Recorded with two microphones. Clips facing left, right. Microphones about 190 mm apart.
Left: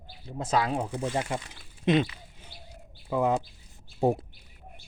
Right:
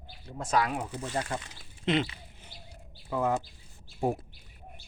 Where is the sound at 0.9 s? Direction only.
15° left (ahead or behind).